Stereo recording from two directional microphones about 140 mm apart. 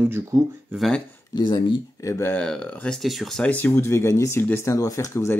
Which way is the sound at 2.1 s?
15° left (ahead or behind).